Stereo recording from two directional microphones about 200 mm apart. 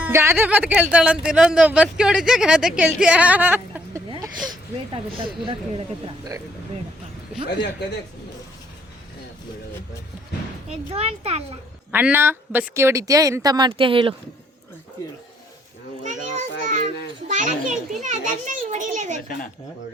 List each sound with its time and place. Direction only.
0.0 s speech: 15° right (ahead or behind)
7.4 s a man's voice: 55° left (ahead or behind)
10.9 s a child's voice: 30° right (ahead or behind)
11.9 s speech: 10° right (ahead or behind); by 14.2 s 25° right (ahead or behind)
16.0 s children playing: 40° right (ahead or behind)
17.3 s a child's voice: 40° right (ahead or behind)